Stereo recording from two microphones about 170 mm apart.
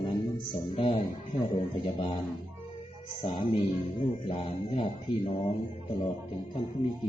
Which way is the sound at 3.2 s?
30° left (ahead or behind).